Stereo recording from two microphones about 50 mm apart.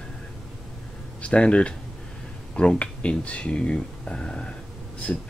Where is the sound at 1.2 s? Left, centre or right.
Left.